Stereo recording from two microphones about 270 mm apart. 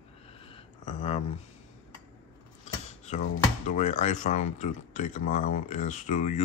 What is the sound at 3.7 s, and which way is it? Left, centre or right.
Speech, left.